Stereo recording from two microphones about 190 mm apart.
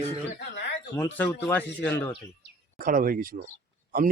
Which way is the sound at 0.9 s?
10° left (ahead or behind).